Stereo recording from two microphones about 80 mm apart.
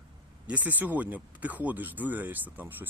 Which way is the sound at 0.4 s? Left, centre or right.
Centre.